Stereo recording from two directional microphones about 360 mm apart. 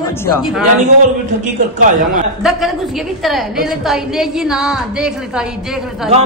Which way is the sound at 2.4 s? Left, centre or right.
Centre.